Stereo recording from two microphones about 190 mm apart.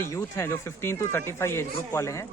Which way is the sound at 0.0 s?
15° left (ahead or behind).